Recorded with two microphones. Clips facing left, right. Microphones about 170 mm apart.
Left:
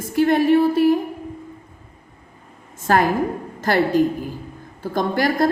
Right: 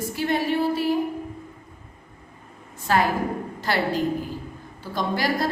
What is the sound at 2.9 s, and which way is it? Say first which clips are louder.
A woman's voice: left 4 dB; 50° left (ahead or behind).